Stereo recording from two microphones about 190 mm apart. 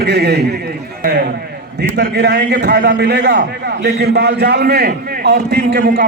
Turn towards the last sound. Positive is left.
turn(degrees=-50)  # may be behind; listen again after turning